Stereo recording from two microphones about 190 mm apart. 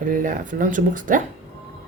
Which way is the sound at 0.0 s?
45° right (ahead or behind).